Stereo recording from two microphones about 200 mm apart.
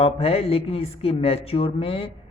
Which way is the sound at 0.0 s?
30° left (ahead or behind).